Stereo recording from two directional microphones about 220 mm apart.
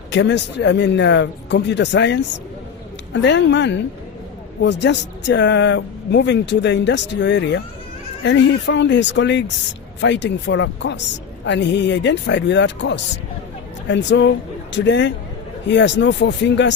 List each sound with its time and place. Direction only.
0.1 s speech: 55° left (ahead or behind)